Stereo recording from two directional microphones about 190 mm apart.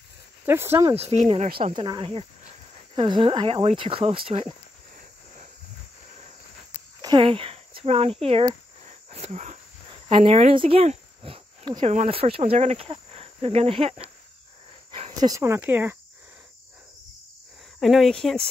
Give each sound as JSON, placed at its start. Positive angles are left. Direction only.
{"t": 0.5, "sound": "speech", "side_deg": -15}
{"t": 0.9, "sound": "speech", "side_deg": -35}
{"t": 1.8, "sound": "speech", "side_deg": -25}
{"t": 7.0, "sound": "cricket", "side_deg": -25}
{"t": 10.0, "sound": "speech", "side_deg": -30}
{"t": 14.9, "sound": "cricket", "side_deg": -35}
{"t": 15.2, "sound": "speech", "side_deg": -15}
{"t": 17.7, "sound": "speech", "side_deg": 0}